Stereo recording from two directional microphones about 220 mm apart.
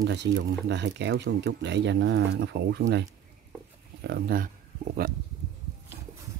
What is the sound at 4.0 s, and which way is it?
Speech, 45° right (ahead or behind).